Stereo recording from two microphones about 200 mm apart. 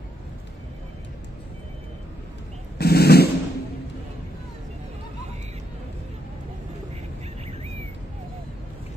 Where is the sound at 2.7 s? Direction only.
50° left (ahead or behind).